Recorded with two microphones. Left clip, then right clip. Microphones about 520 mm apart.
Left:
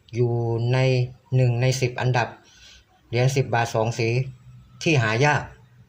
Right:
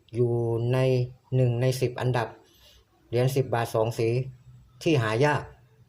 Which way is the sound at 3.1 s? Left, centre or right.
Right.